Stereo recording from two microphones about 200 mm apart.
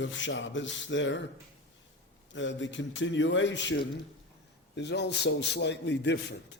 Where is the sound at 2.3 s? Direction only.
65° left (ahead or behind).